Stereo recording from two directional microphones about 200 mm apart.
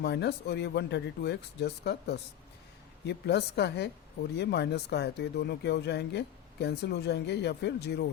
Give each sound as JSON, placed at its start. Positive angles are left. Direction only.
{"t": 0.0, "sound": "speech", "side_deg": 55}